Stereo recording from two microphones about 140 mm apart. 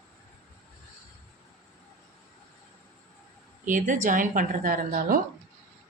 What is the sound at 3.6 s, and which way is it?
A woman's voice, 65° right (ahead or behind).